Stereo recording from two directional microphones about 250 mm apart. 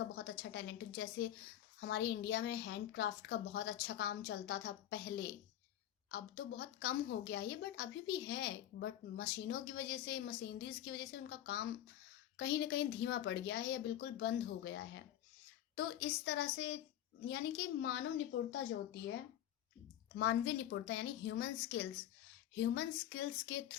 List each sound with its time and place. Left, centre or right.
0.2 s a woman's voice: left
20.1 s a woman's voice: left